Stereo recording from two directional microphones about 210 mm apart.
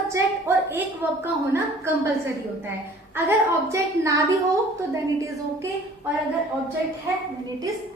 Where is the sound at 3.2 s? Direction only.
15° right (ahead or behind).